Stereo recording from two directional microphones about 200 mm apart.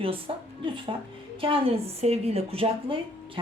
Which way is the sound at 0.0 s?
25° right (ahead or behind).